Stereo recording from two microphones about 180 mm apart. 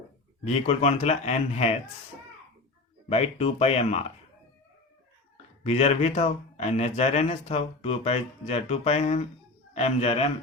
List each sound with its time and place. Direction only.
0.4 s speech: 35° left (ahead or behind)
3.1 s speech: 35° left (ahead or behind)
5.6 s speech: 35° left (ahead or behind)